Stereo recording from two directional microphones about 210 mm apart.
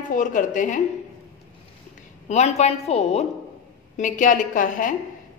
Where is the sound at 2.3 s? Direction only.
30° left (ahead or behind).